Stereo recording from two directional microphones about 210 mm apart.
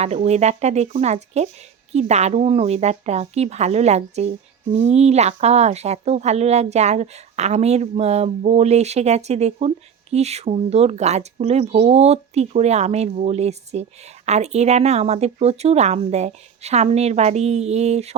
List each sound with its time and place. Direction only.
0.0 s a woman's voice: 30° right (ahead or behind)